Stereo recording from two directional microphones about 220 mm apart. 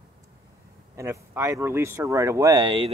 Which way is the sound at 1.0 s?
15° right (ahead or behind).